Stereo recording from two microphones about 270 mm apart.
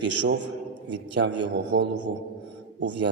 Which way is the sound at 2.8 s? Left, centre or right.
Right.